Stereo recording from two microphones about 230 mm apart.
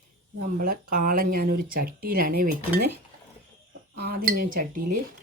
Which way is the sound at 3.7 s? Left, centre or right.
Right.